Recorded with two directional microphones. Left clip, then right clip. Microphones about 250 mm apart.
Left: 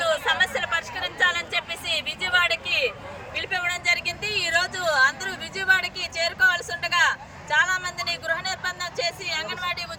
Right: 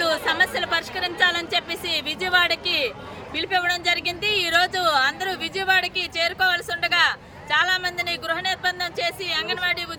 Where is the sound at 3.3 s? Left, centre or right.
Centre.